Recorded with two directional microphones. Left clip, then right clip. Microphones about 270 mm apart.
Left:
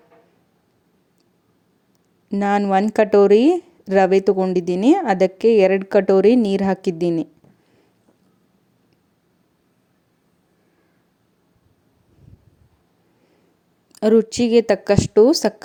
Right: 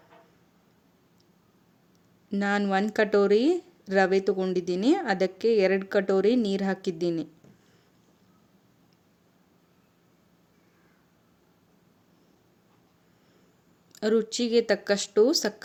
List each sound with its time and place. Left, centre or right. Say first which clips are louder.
2.3 s speech: left 9 dB; left
13.9 s speech: left 9 dB; left